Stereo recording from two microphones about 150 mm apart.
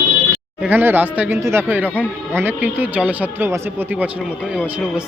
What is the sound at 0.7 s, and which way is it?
A man's voice, 15° right (ahead or behind).